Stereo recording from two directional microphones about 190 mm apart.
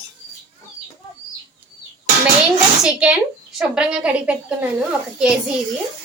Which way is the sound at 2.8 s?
5° right (ahead or behind).